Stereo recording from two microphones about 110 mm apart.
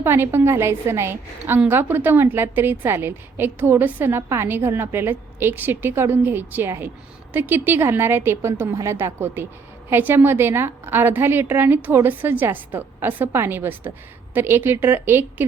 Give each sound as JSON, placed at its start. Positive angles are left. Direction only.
{"t": 0.0, "sound": "a woman's voice", "side_deg": -20}